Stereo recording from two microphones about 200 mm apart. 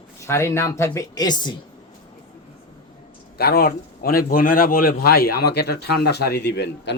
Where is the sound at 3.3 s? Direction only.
50° left (ahead or behind).